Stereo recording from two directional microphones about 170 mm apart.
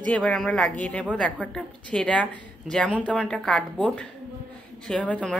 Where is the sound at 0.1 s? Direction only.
5° left (ahead or behind).